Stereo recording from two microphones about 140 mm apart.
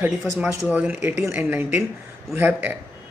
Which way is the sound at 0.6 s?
10° right (ahead or behind).